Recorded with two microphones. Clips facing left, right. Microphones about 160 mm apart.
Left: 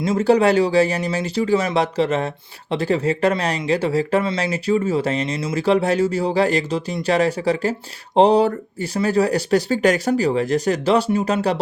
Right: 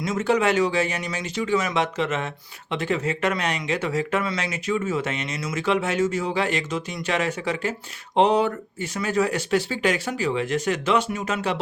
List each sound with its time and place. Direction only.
0.0 s speech: 30° left (ahead or behind)